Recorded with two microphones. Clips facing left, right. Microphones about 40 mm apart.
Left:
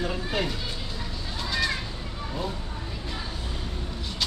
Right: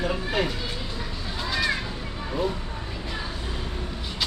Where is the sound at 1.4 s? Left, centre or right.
Centre.